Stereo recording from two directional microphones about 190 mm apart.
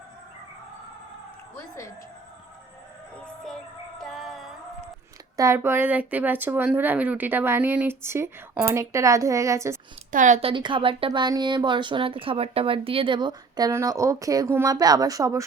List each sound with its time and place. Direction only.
1.5 s a woman's voice: 15° left (ahead or behind)
3.4 s music: centre (ahead or behind)
5.4 s speech: 15° right (ahead or behind)
10.1 s speech: 40° right (ahead or behind)
10.5 s speech: 25° right (ahead or behind)